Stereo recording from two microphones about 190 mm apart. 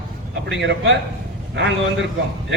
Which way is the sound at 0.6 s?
65° right (ahead or behind).